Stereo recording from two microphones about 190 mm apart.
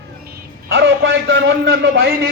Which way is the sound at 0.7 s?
75° right (ahead or behind).